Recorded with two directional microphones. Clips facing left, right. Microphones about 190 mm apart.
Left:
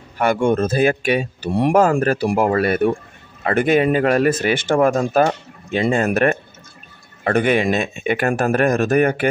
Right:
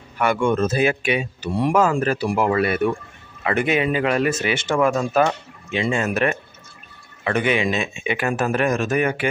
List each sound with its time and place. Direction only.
0.2 s speech: 40° left (ahead or behind)
4.7 s speech: 40° left (ahead or behind)
7.2 s speech: 45° left (ahead or behind)